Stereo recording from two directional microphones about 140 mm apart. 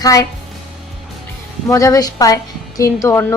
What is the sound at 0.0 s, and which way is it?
Speech, 25° left (ahead or behind).